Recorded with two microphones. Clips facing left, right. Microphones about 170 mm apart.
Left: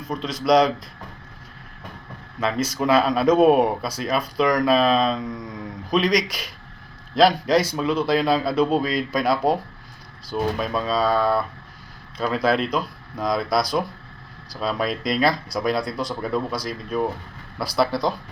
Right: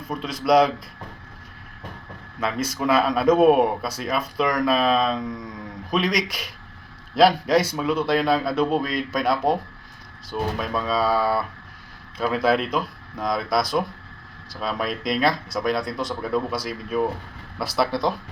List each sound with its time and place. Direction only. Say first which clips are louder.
0.1 s speech: left 1 dB; 5° right (ahead or behind)
2.7 s speech: left 1 dB; centre (ahead or behind)